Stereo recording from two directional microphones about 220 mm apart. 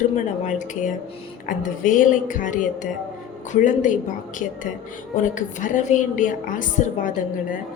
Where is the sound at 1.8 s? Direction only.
35° left (ahead or behind).